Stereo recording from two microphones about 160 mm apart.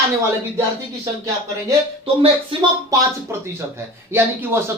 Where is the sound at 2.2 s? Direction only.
25° right (ahead or behind).